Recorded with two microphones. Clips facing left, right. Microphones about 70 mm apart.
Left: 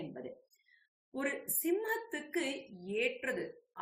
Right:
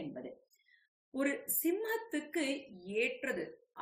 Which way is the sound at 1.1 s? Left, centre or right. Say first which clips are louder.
Right 3 dB; centre.